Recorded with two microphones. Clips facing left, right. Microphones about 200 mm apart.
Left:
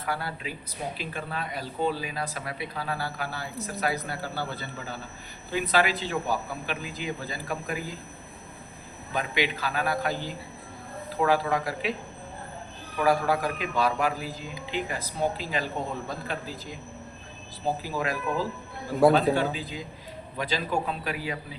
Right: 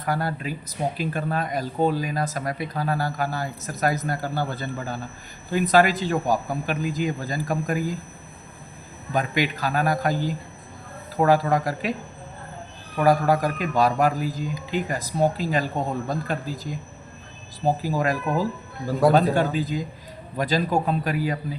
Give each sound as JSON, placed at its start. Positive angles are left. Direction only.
{"t": 0.0, "sound": "speech", "side_deg": -45}
{"t": 9.1, "sound": "speech", "side_deg": -45}
{"t": 13.0, "sound": "speech", "side_deg": -40}
{"t": 17.8, "sound": "speech", "side_deg": -45}